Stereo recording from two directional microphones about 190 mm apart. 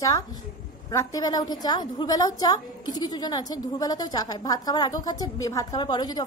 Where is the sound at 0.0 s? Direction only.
20° left (ahead or behind).